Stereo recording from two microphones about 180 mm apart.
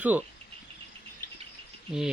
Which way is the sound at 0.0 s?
10° right (ahead or behind).